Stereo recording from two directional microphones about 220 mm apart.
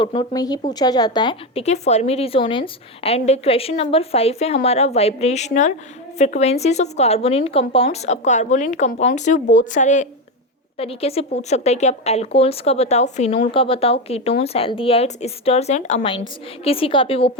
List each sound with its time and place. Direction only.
0.0 s speech: 20° left (ahead or behind)